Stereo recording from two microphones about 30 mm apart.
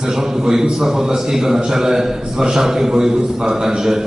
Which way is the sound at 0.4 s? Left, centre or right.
Centre.